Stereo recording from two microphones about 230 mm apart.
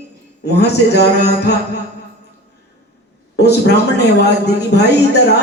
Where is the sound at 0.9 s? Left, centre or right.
Left.